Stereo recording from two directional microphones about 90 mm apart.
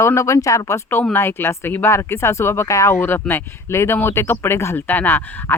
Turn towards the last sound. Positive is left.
turn(degrees=25)  # may be behind; listen again after turning